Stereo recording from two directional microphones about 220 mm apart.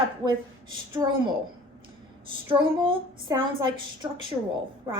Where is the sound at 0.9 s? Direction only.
20° right (ahead or behind).